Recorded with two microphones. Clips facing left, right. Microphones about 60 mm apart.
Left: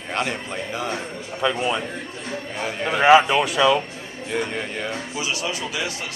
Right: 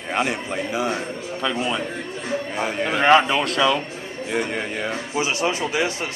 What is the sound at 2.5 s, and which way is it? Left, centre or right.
A man's voice, centre.